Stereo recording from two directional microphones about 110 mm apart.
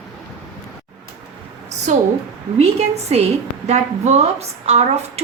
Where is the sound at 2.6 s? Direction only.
75° right (ahead or behind).